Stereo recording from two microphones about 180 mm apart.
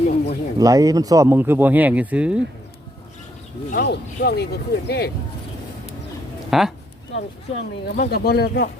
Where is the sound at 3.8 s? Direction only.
65° left (ahead or behind).